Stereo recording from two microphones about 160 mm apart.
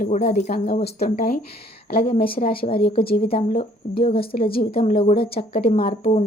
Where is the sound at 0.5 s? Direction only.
70° left (ahead or behind).